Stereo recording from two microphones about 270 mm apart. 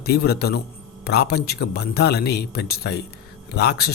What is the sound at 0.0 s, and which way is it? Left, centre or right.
Speech, left.